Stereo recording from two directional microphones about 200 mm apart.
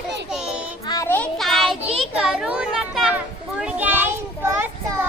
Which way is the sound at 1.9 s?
Centre (ahead or behind).